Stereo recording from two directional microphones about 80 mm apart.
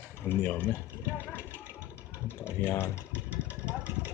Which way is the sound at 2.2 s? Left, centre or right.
Left.